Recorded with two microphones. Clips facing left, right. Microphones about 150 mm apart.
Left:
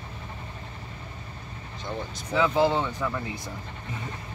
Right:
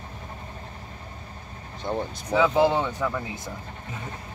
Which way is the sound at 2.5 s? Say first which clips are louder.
Right 1 dB; 15° right (ahead or behind).